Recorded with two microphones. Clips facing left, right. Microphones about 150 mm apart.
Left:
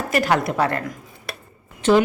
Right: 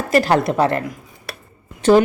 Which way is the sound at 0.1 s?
30° right (ahead or behind).